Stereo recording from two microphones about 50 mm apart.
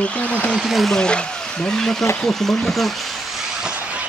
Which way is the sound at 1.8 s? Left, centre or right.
Centre.